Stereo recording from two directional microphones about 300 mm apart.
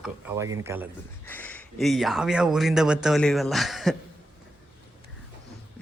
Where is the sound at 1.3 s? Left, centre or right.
Centre.